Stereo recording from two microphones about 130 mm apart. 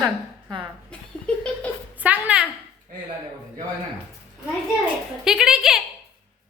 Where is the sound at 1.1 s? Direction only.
5° left (ahead or behind).